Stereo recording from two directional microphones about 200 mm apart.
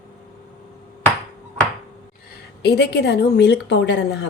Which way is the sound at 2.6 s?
55° left (ahead or behind).